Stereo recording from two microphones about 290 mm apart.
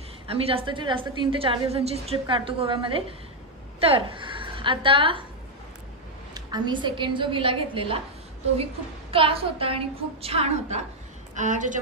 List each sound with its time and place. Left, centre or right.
0.3 s a woman's voice: centre
6.3 s a woman's voice: centre
9.1 s a woman's voice: centre